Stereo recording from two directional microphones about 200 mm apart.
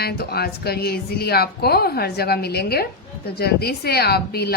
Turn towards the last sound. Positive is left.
turn(degrees=55)  # may be behind; listen again after turning